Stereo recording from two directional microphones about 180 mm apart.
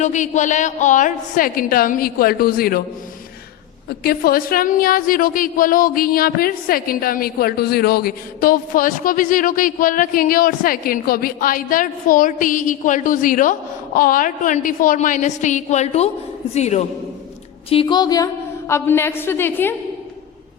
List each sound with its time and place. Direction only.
0.0 s a woman's voice: 40° left (ahead or behind)
3.8 s a woman's voice: 55° left (ahead or behind); by 16.8 s 40° left (ahead or behind)
17.7 s a woman's voice: 30° left (ahead or behind); by 19.7 s 10° left (ahead or behind)